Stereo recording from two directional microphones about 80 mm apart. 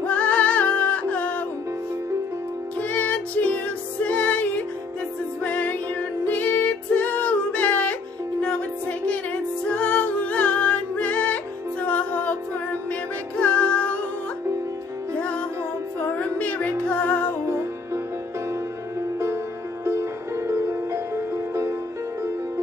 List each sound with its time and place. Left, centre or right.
0.0 s music: centre
2.8 s music: centre
13.4 s music: centre
16.2 s music: centre
19.1 s music: right